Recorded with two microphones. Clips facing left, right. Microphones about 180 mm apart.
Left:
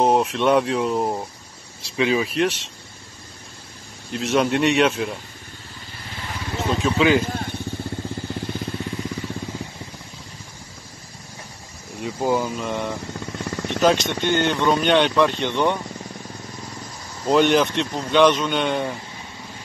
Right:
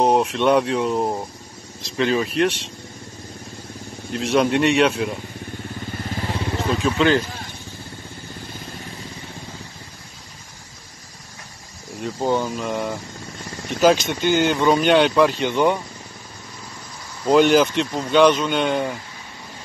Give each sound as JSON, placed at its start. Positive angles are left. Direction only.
{"t": 0.0, "sound": "speech", "side_deg": 0}
{"t": 4.1, "sound": "speech", "side_deg": 0}
{"t": 5.9, "sound": "vehicle", "side_deg": -45}
{"t": 6.6, "sound": "speech", "side_deg": 0}
{"t": 12.0, "sound": "speech", "side_deg": 5}
{"t": 17.3, "sound": "speech", "side_deg": 0}